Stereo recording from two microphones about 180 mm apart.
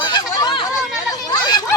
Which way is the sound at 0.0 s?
25° left (ahead or behind).